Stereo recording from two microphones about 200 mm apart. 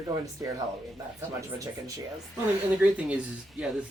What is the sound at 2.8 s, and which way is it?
Speech, 5° right (ahead or behind).